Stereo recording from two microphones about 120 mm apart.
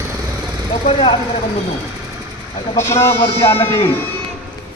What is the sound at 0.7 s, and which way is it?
Speech, 45° left (ahead or behind).